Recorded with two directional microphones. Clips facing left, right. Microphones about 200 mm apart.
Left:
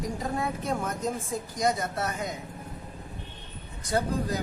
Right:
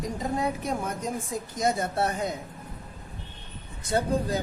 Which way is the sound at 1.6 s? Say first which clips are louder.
Right 2 dB; 25° right (ahead or behind).